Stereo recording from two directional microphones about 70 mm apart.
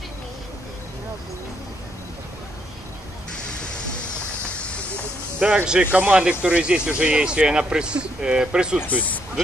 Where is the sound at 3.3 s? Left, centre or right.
Centre.